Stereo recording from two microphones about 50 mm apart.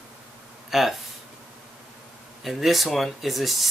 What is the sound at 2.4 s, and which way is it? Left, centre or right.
Speech, centre.